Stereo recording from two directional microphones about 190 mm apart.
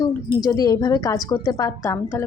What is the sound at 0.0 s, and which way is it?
A woman's voice, 20° left (ahead or behind).